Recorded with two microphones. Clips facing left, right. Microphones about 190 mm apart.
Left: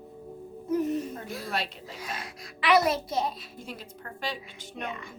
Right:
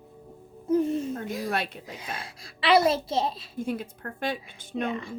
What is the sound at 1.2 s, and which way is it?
Speech, 15° right (ahead or behind).